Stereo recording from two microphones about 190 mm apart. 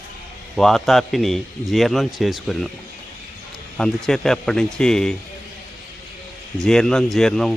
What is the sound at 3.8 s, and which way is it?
A man's voice, centre (ahead or behind).